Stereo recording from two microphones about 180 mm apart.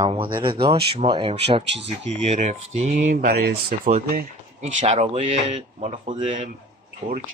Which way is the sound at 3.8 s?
45° right (ahead or behind).